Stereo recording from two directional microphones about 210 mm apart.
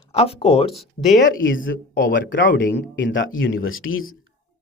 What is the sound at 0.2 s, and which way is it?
Speech, 30° left (ahead or behind).